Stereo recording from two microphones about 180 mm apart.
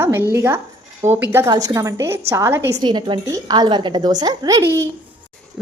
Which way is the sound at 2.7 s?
25° right (ahead or behind).